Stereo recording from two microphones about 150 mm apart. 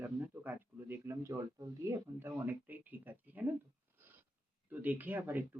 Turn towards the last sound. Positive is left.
turn(degrees=-10)  # may be behind; listen again after turning